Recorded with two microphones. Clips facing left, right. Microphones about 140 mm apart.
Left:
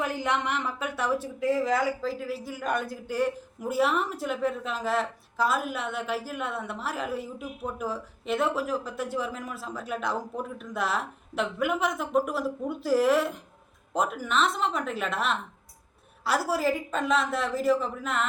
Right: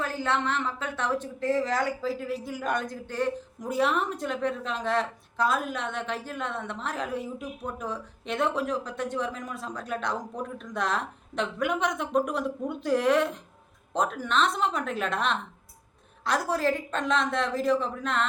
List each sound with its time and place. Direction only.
0.0 s speech: 15° left (ahead or behind)